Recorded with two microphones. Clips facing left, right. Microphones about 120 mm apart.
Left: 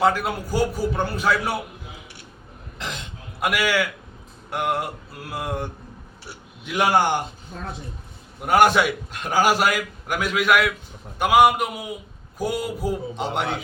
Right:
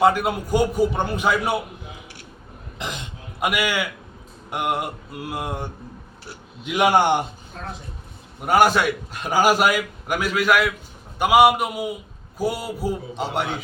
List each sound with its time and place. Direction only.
0.0 s a man's voice: 10° right (ahead or behind)
2.7 s cough: 15° right (ahead or behind)
3.4 s a man's voice: 15° right (ahead or behind)
6.7 s a man's voice: 15° right (ahead or behind)
8.4 s a man's voice: centre (ahead or behind)